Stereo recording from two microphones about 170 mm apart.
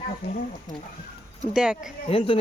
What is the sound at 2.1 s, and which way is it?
Speech, 30° left (ahead or behind).